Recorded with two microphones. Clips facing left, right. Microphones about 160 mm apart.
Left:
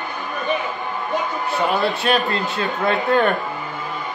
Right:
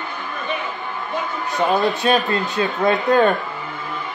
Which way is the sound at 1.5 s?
20° right (ahead or behind).